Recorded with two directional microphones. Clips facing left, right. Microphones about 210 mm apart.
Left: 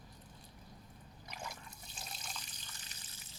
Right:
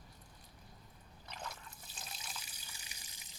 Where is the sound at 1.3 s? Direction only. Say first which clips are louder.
Even; 10° left (ahead or behind).